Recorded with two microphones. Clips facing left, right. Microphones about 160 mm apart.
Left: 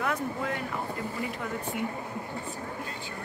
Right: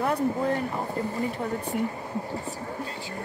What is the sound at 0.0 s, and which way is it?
Speech, 35° right (ahead or behind).